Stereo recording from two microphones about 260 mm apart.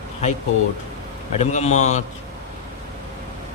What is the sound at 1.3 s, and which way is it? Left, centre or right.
Speech, left.